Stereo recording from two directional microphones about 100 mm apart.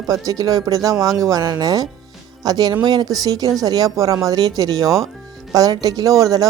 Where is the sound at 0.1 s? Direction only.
35° right (ahead or behind).